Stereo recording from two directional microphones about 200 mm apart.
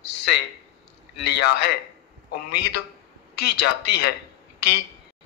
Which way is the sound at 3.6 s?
50° left (ahead or behind).